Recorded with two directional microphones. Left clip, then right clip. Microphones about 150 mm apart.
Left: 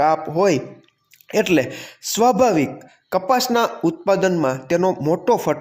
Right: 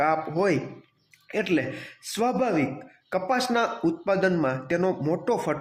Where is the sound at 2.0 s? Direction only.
25° left (ahead or behind).